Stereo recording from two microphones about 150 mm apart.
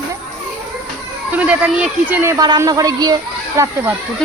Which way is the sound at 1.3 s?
10° right (ahead or behind).